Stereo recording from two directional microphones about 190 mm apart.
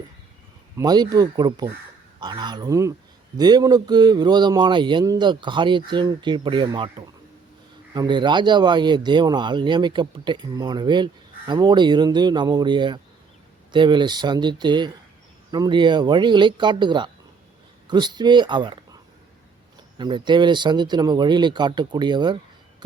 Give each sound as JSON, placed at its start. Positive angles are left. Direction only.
{"t": 0.8, "sound": "speech", "side_deg": -20}
{"t": 7.9, "sound": "speech", "side_deg": -25}
{"t": 20.0, "sound": "speech", "side_deg": -25}